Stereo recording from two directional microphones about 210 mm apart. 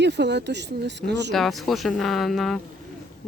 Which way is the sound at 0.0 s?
55° right (ahead or behind).